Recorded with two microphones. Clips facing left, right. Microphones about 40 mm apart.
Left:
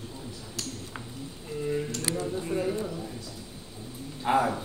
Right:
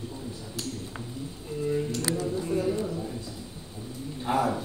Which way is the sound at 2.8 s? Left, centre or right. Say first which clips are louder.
Right 3 dB; centre.